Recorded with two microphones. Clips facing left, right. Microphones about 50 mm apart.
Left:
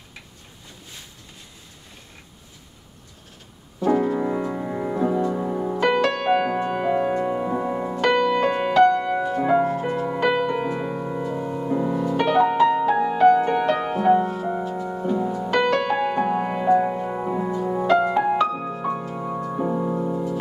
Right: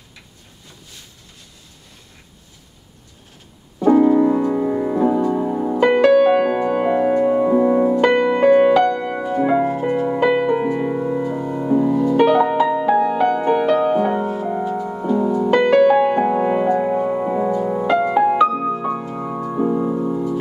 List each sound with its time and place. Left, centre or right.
3.8 s piano: centre
4.5 s music: centre
7.9 s music: right
11.7 s music: centre
12.2 s music: centre